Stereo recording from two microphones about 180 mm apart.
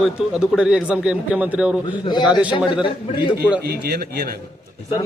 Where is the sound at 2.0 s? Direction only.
25° left (ahead or behind).